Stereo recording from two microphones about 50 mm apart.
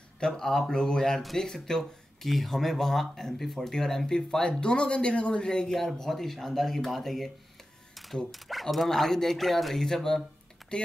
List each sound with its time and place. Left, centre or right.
0.4 s speech: centre
7.9 s a sound: centre
8.3 s speech: centre